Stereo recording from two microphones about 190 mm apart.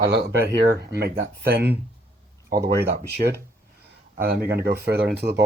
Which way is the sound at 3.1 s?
60° right (ahead or behind).